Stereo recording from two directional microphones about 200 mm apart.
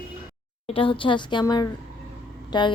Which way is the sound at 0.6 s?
25° left (ahead or behind).